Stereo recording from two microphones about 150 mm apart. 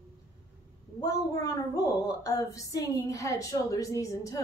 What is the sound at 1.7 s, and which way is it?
A woman's voice, 25° left (ahead or behind).